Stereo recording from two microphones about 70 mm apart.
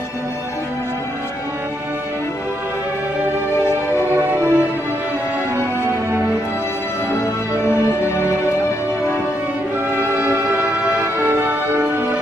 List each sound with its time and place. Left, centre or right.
4.1 s music: right
9.9 s music: right